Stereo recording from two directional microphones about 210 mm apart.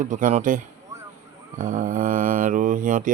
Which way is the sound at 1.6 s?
40° right (ahead or behind).